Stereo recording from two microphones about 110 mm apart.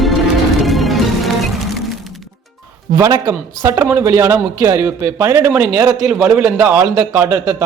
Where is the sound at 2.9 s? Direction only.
25° right (ahead or behind).